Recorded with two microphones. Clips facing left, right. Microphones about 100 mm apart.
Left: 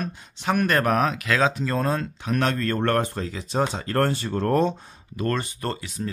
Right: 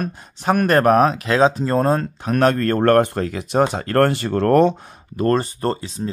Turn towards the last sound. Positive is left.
turn(degrees=-30)  # may be behind; listen again after turning